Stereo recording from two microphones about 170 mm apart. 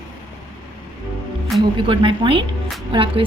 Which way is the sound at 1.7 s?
30° right (ahead or behind).